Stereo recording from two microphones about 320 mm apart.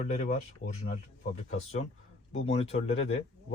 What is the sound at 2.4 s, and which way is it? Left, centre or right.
Speech, centre.